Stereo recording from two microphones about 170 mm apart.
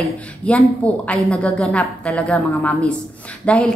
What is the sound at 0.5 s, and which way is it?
Speech, 10° left (ahead or behind).